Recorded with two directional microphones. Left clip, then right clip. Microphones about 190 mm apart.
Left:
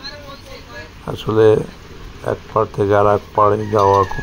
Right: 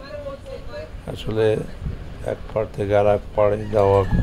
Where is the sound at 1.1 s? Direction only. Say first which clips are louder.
Left 8 dB; 15° left (ahead or behind).